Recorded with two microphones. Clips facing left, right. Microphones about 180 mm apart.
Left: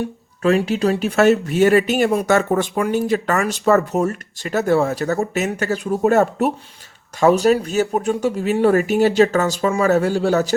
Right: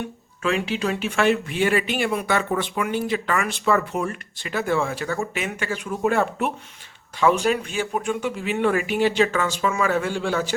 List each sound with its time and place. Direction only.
0.0 s speech: 40° left (ahead or behind)